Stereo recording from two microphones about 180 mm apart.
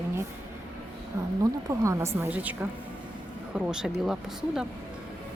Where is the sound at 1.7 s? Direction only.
15° right (ahead or behind).